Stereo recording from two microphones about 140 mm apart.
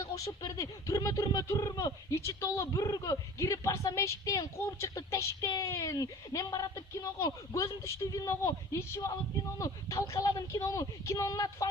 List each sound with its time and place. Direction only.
0.0 s speech: 25° left (ahead or behind)